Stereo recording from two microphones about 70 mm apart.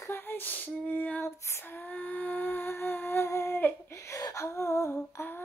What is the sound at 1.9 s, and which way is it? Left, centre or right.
Humming, left.